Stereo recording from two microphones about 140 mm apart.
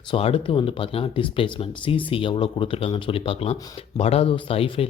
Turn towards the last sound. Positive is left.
turn(degrees=45)  # may be behind; listen again after turning